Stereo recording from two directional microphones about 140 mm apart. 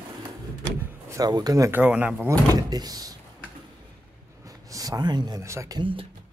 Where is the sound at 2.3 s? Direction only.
25° right (ahead or behind).